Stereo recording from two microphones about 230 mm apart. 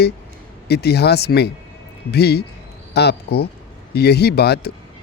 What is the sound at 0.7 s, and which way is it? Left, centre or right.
Speech, left.